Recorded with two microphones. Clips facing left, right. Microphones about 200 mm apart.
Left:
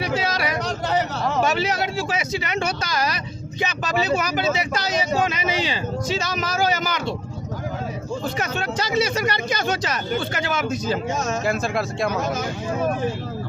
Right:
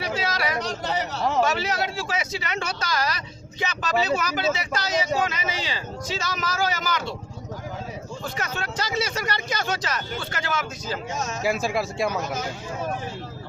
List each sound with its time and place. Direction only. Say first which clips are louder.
0.2 s a sound: left 2 dB; 15° left (ahead or behind)
1.4 s speech: left 3 dB; 15° left (ahead or behind)
8.4 s speech: left 4 dB; 20° left (ahead or behind)
11.4 s speech: left 1 dB; 5° right (ahead or behind)